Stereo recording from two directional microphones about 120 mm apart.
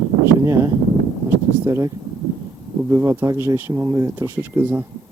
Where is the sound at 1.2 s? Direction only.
25° right (ahead or behind).